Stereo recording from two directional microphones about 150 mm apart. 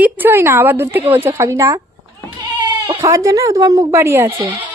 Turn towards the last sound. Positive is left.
turn(degrees=-15)  # may be behind; listen again after turning